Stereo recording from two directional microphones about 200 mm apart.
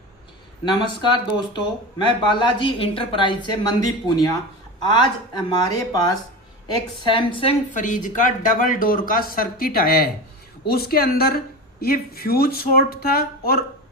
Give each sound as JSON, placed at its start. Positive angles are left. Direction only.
{"t": 0.6, "sound": "speech", "side_deg": 25}
{"t": 7.8, "sound": "speech", "side_deg": 40}